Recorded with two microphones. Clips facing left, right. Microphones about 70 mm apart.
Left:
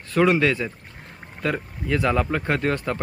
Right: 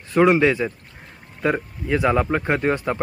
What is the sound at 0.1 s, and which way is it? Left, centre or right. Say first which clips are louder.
Speech: right 3 dB; centre.